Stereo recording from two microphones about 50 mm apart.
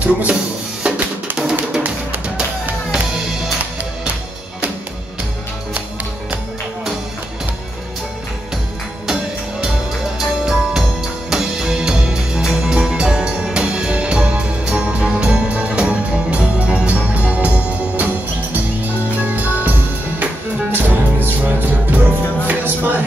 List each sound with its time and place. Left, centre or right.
0.0 s speech: right
0.8 s drum: right
1.3 s music: centre
9.0 s music: centre; by 19.7 s right
20.7 s music: right